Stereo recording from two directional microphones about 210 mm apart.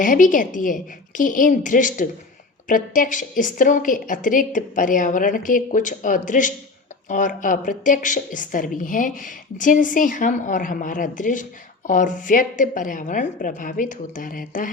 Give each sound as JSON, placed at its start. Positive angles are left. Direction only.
{"t": 0.0, "sound": "a woman's voice", "side_deg": 40}